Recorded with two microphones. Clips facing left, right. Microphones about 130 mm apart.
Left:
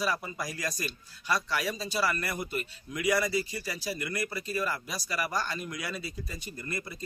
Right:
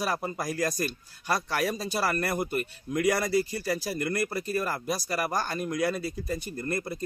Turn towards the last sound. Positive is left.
turn(degrees=-45)  # may be behind; listen again after turning